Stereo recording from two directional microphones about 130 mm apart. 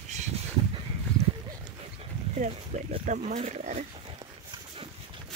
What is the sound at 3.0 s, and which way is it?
Speech, 75° right (ahead or behind).